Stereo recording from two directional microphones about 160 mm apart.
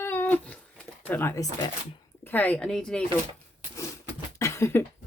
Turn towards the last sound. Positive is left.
turn(degrees=15)  # may be behind; listen again after turning